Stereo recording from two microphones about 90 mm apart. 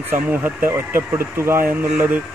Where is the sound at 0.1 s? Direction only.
20° right (ahead or behind).